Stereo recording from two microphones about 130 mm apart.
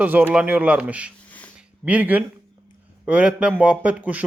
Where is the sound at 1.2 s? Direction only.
10° left (ahead or behind).